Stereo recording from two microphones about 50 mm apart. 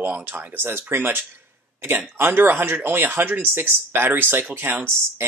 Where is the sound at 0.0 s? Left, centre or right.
Right.